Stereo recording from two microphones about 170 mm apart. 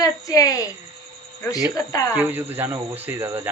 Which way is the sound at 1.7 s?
20° left (ahead or behind).